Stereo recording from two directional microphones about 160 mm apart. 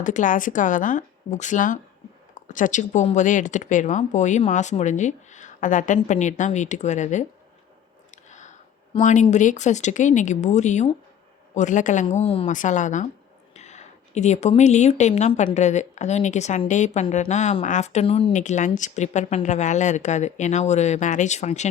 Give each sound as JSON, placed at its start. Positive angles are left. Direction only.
{"t": 0.0, "sound": "speech", "side_deg": 55}
{"t": 12.5, "sound": "speech", "side_deg": 50}